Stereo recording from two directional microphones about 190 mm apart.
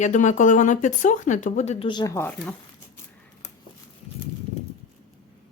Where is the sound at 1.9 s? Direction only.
20° left (ahead or behind).